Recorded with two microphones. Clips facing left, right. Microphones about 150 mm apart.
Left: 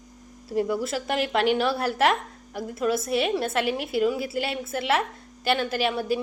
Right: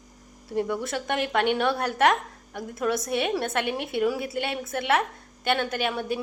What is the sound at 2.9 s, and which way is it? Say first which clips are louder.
Speech: left 2 dB; 30° left (ahead or behind).